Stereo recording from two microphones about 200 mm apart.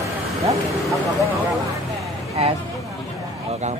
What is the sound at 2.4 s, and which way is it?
Speech, 30° right (ahead or behind).